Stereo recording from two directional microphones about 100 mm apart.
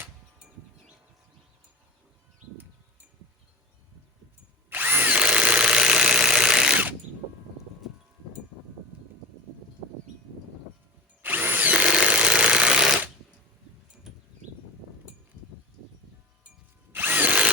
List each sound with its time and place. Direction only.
4.7 s drill: 20° right (ahead or behind); by 6.7 s 5° right (ahead or behind)
11.2 s drill: 20° right (ahead or behind)
11.8 s jackhammer: 5° right (ahead or behind)
16.9 s drill: 20° right (ahead or behind)